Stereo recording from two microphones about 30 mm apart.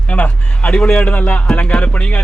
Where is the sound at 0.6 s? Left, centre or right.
Left.